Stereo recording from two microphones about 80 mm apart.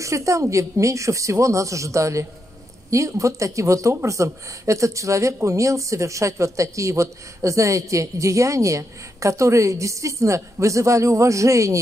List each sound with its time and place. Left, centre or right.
0.0 s speech: right